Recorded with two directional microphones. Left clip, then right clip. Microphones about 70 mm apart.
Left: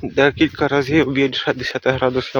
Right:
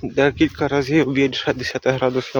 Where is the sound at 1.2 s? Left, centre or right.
Right.